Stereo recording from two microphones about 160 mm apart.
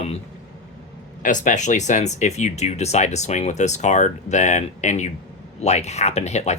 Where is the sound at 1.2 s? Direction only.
50° left (ahead or behind).